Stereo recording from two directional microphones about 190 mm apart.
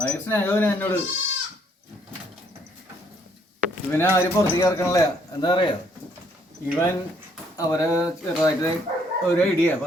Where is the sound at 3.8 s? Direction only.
10° left (ahead or behind).